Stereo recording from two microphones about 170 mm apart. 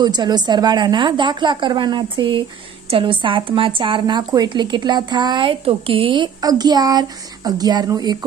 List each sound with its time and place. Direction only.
0.0 s speech: 25° right (ahead or behind)